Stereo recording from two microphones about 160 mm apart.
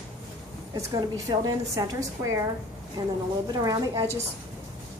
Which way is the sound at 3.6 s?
20° right (ahead or behind).